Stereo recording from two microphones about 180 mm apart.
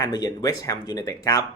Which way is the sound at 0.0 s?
20° left (ahead or behind).